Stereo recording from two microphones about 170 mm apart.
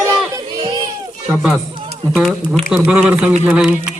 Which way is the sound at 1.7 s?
30° right (ahead or behind).